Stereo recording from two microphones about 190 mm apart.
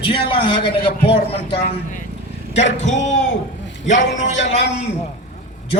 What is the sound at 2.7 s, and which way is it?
Music, 40° left (ahead or behind).